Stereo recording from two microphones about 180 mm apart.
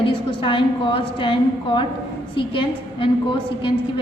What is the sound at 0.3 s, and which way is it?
A woman's voice, 25° left (ahead or behind).